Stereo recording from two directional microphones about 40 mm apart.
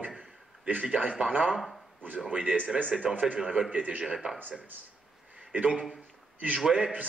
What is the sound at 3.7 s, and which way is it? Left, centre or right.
Speech, right.